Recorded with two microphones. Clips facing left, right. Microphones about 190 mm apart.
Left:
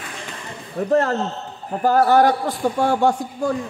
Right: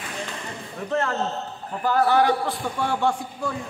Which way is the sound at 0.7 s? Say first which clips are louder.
Left 7 dB; 40° left (ahead or behind).